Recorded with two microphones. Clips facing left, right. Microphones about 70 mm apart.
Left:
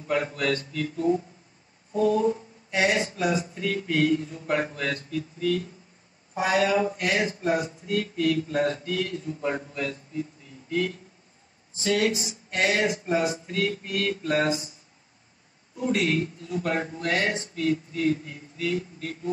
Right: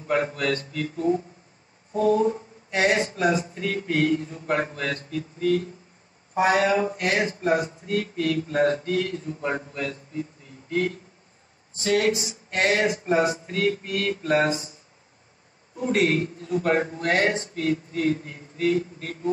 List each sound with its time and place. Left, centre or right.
0.1 s speech: right
2.7 s speech: right
11.8 s speech: right
15.8 s speech: right